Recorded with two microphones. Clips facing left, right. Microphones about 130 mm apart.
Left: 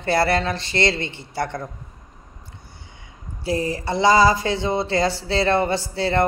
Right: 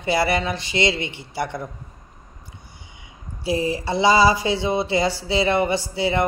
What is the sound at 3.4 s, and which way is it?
Mantra, 25° right (ahead or behind).